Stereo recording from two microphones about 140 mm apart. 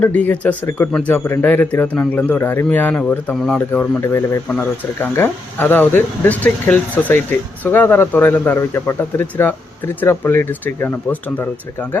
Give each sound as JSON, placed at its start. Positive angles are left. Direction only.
{"t": 0.0, "sound": "speech", "side_deg": 10}
{"t": 3.7, "sound": "speech", "side_deg": 15}